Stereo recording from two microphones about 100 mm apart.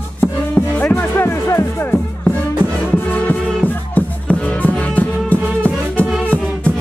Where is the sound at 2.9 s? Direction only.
20° left (ahead or behind).